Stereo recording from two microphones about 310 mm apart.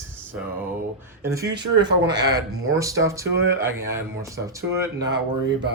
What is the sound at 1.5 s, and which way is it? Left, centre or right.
Mantra, right.